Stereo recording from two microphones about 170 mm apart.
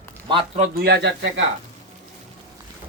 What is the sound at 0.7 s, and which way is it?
Speech, 70° right (ahead or behind).